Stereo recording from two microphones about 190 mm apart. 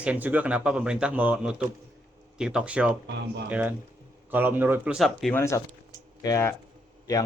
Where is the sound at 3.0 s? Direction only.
65° right (ahead or behind).